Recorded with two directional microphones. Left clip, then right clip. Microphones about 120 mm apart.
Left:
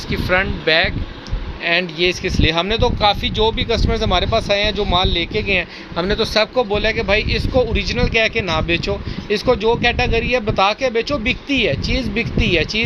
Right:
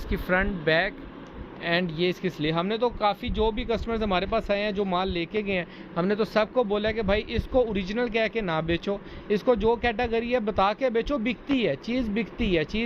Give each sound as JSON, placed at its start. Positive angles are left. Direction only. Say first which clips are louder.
{"t": 0.1, "sound": "speech", "louder": "left 8 dB", "side_deg": 20}
{"t": 2.5, "sound": "speech", "louder": "left 8 dB", "side_deg": 30}
{"t": 3.8, "sound": "speech", "louder": "left 8 dB", "side_deg": 15}
{"t": 6.0, "sound": "speech", "louder": "left 7 dB", "side_deg": 25}